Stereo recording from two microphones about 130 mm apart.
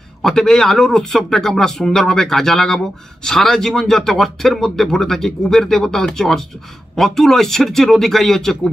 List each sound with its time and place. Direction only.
0.2 s speech: 5° left (ahead or behind)